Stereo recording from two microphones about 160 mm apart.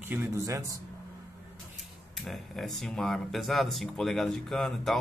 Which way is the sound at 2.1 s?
Centre (ahead or behind).